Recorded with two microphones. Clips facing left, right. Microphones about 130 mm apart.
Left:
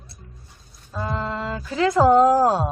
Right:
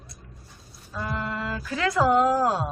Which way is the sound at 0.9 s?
25° left (ahead or behind).